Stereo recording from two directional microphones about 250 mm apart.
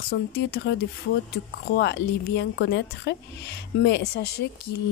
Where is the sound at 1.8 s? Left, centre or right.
Left.